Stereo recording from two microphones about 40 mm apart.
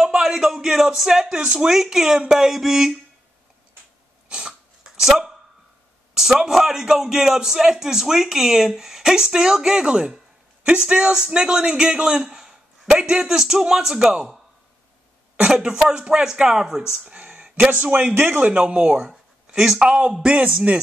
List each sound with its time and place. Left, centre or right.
0.0 s speech: centre
1.3 s speech: right
1.7 s a man's voice: centre
4.3 s cough: right
4.8 s a sound: centre
6.5 s a man's voice: centre
15.4 s a man's voice: centre
17.2 s a sound: right
17.9 s a man's voice: right
18.4 s speech: right
19.0 s a sound: centre
19.9 s speech: right